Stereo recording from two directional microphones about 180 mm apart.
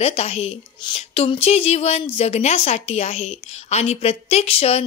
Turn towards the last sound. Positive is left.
turn(degrees=35)  # may be behind; listen again after turning